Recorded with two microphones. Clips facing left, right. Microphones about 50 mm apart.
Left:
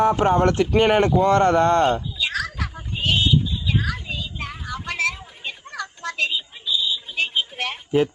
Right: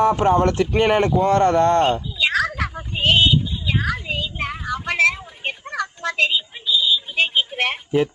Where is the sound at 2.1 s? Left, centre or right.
Right.